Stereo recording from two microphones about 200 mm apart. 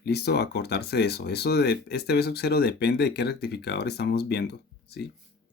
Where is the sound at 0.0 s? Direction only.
55° left (ahead or behind).